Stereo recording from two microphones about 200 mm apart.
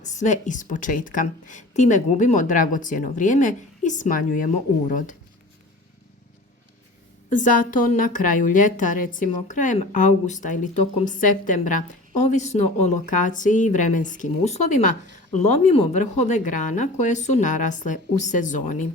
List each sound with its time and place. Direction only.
0.0 s a woman's voice: 35° left (ahead or behind)
7.3 s a woman's voice: 40° left (ahead or behind)